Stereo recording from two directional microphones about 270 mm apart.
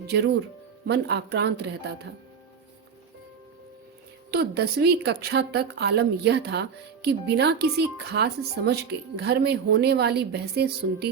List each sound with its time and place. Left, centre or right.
0.9 s a woman's voice: right
4.3 s a woman's voice: right